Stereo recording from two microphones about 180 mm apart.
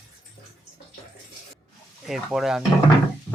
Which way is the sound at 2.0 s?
Centre (ahead or behind).